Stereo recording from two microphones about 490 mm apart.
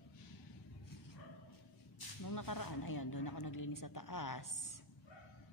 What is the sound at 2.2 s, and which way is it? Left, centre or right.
A woman's voice, left.